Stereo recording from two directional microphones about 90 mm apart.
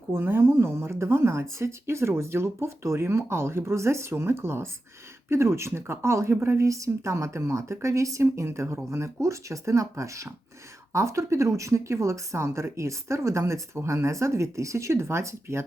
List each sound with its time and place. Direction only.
0.1 s a woman's voice: 25° right (ahead or behind)